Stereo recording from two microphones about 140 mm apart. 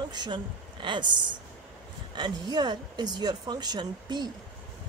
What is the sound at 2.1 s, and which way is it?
A woman's voice, 30° right (ahead or behind).